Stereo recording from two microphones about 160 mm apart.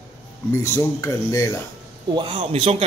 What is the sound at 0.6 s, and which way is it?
Speech, 15° left (ahead or behind).